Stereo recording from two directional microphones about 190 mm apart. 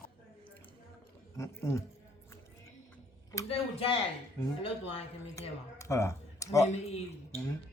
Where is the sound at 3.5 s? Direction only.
30° left (ahead or behind).